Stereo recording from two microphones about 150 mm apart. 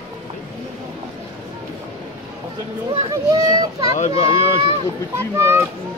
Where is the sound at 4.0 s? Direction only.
40° left (ahead or behind).